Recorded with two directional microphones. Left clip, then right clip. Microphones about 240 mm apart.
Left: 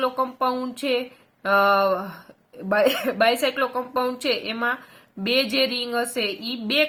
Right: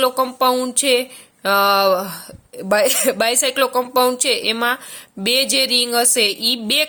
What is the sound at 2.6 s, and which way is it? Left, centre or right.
A woman's voice, right.